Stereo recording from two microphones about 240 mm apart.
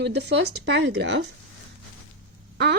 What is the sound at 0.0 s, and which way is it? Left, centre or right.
Speech, right.